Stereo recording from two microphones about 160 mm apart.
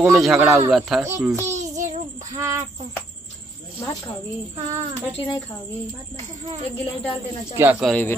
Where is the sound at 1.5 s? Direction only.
50° right (ahead or behind).